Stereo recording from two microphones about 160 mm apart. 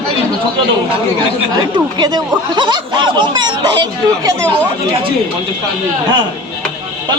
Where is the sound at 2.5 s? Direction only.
30° right (ahead or behind).